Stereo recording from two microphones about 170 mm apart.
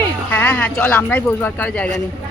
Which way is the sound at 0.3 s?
10° left (ahead or behind).